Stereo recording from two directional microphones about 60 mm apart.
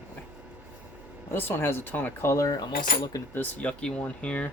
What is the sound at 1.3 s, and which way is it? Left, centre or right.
Speech, left.